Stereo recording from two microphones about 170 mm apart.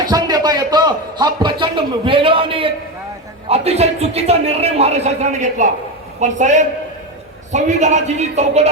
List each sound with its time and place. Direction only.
0.0 s a man's voice: 20° right (ahead or behind); by 8.7 s 40° right (ahead or behind)